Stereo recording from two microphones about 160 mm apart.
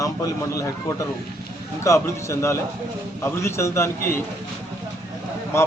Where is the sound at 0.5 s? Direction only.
20° left (ahead or behind).